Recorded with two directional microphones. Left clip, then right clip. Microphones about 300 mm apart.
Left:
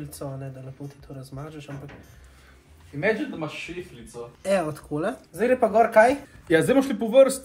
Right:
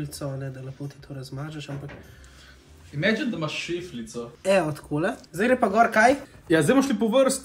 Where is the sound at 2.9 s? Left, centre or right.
Centre.